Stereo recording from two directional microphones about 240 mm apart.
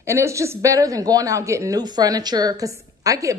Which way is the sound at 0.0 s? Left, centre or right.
Centre.